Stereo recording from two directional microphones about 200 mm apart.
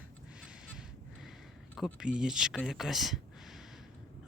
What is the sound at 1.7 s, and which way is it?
Speech, centre (ahead or behind).